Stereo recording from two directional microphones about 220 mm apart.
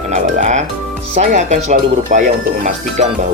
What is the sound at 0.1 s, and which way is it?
Speech, 30° right (ahead or behind).